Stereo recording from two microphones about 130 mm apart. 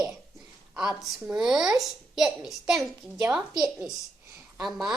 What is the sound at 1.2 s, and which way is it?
Speech, 5° right (ahead or behind).